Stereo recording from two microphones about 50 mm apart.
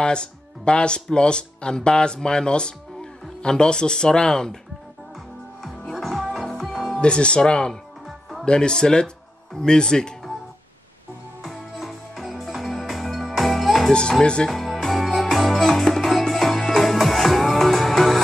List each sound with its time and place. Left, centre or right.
0.0 s speech: centre
5.6 s music: centre
7.0 s speech: left
11.4 s music: centre
14.2 s speech: centre
14.5 s music: centre